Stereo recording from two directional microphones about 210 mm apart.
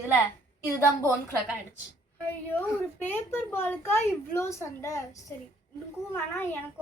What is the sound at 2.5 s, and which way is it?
Speech, 10° left (ahead or behind).